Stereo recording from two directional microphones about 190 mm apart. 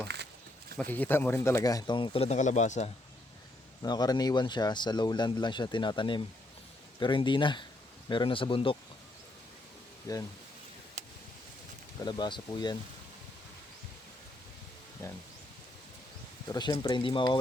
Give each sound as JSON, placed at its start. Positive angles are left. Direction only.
{"t": 0.8, "sound": "speech", "side_deg": 10}
{"t": 3.8, "sound": "speech", "side_deg": 20}
{"t": 10.1, "sound": "speech", "side_deg": 20}
{"t": 11.0, "sound": "a sound", "side_deg": -40}
{"t": 12.0, "sound": "speech", "side_deg": 25}
{"t": 16.5, "sound": "speech", "side_deg": 20}